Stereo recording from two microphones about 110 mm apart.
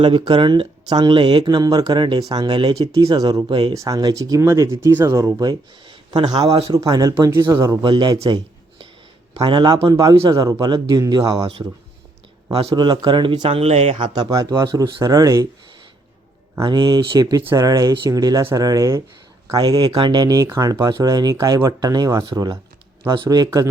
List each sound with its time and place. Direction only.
0.0 s speech: 50° right (ahead or behind)
2.8 s speech: 35° right (ahead or behind)
7.1 s speech: 25° right (ahead or behind)
7.9 s speech: 45° right (ahead or behind)
9.4 s speech: 45° right (ahead or behind)
11.3 s speech: 60° right (ahead or behind)
12.5 s a man's voice: 70° right (ahead or behind)
12.7 s speech: 40° right (ahead or behind)
13.6 s speech: 70° right (ahead or behind)
14.0 s speech: 40° right (ahead or behind)
16.6 s speech: 40° right (ahead or behind)
19.5 s speech: 40° right (ahead or behind)